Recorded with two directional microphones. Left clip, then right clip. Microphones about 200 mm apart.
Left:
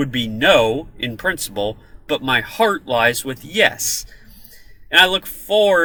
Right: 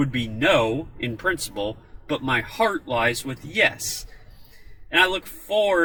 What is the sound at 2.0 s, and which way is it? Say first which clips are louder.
Speech: left 6 dB; 15° left (ahead or behind).